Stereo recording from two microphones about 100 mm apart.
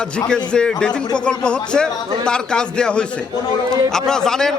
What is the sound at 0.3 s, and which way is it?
A man's voice, 10° left (ahead or behind).